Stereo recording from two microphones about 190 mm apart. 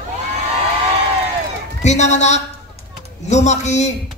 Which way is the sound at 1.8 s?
35° left (ahead or behind).